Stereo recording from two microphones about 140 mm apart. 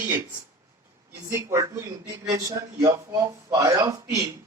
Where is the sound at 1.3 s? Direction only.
20° right (ahead or behind).